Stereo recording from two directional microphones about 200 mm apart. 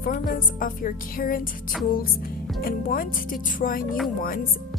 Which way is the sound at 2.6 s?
45° left (ahead or behind).